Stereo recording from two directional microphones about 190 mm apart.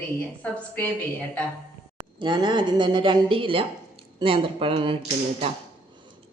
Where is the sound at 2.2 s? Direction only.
25° right (ahead or behind).